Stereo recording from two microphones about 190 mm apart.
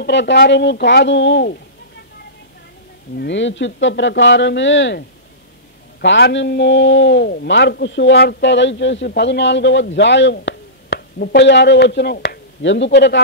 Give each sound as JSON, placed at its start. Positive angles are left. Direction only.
{"t": 0.0, "sound": "speech", "side_deg": 65}
{"t": 3.2, "sound": "a man's voice", "side_deg": 70}
{"t": 5.9, "sound": "a man's voice", "side_deg": 60}